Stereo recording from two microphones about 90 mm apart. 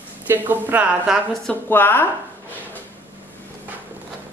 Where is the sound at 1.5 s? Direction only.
20° left (ahead or behind).